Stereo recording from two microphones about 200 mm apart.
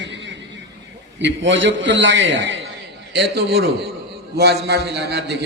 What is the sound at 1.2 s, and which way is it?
Speech, 60° right (ahead or behind).